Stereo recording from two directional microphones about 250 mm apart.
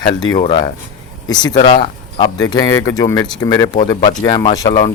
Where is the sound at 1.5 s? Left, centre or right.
Left.